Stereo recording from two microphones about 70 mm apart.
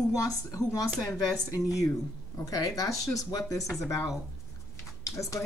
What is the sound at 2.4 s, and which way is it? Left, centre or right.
Speech, left.